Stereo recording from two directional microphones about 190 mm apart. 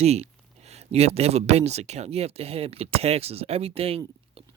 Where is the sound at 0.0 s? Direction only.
35° right (ahead or behind).